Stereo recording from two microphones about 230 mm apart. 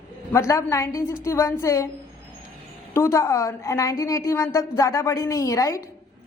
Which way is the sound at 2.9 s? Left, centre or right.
Centre.